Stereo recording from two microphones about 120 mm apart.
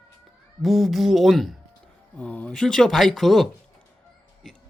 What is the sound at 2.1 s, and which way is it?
Speech, 10° left (ahead or behind).